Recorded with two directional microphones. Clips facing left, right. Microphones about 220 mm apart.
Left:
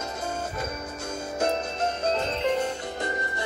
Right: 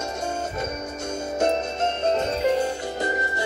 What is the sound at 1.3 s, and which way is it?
Music, 25° right (ahead or behind).